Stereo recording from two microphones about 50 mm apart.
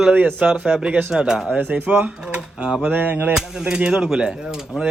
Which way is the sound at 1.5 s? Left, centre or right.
Right.